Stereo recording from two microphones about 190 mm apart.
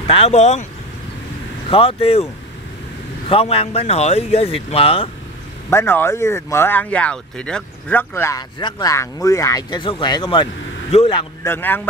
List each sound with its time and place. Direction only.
0.0 s speech: 35° left (ahead or behind)
1.7 s speech: 30° left (ahead or behind)
3.3 s speech: 30° left (ahead or behind)
5.7 s speech: 10° left (ahead or behind); by 11.2 s 30° left (ahead or behind)
11.4 s speech: 10° left (ahead or behind)